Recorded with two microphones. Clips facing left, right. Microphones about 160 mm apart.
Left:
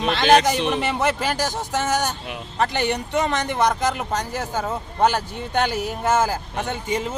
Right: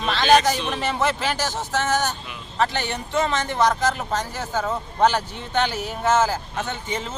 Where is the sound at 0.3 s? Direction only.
65° left (ahead or behind).